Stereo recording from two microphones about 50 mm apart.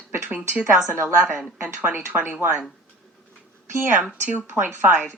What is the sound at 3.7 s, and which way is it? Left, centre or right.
Speech, right.